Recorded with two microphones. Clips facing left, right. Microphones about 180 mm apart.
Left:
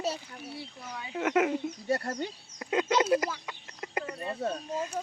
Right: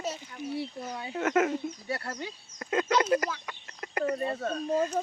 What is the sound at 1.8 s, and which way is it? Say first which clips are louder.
Speech: left 5 dB; 40° left (ahead or behind).